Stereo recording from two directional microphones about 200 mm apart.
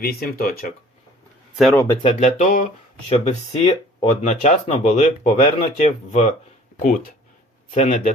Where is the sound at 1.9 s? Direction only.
35° left (ahead or behind).